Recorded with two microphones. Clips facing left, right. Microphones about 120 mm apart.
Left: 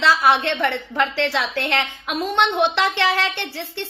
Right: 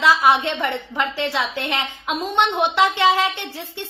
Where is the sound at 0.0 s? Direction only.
15° right (ahead or behind).